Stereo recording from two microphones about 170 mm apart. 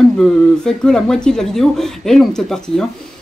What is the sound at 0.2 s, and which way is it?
Speech, 5° left (ahead or behind).